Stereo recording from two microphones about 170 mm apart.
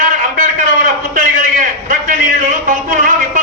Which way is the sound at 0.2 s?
50° right (ahead or behind).